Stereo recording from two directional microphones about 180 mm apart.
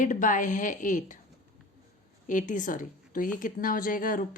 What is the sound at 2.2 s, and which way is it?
A woman's voice, 45° left (ahead or behind).